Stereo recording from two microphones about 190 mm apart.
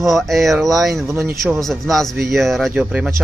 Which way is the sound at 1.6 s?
Centre (ahead or behind).